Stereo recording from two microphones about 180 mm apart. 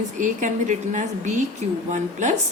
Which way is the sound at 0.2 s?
45° right (ahead or behind).